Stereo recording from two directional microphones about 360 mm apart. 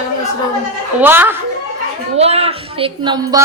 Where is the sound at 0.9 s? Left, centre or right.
Centre.